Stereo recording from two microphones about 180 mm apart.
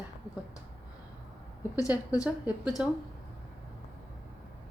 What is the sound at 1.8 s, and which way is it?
Speech, 20° left (ahead or behind).